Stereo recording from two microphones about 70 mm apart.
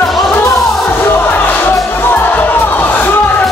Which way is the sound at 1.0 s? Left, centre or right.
Left.